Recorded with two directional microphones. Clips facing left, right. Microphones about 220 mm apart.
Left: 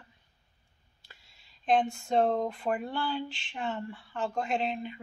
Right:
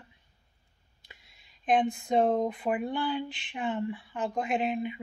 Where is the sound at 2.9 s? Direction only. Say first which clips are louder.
Right 2 dB; 15° right (ahead or behind).